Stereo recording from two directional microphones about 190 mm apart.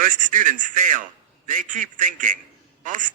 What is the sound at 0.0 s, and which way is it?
A man's voice, 40° right (ahead or behind).